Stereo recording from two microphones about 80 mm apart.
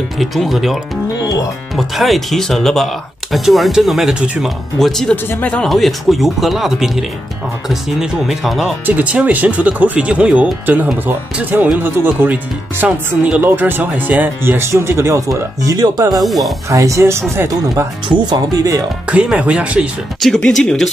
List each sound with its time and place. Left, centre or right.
0.2 s speech: centre
1.8 s speech: centre
4.7 s speech: centre
5.1 s speech: left
5.7 s speech: centre
8.8 s speech: centre; by 16.0 s right
16.2 s speech: centre
16.6 s speech: right
18.0 s speech: right
19.0 s speech: centre
20.2 s speech: centre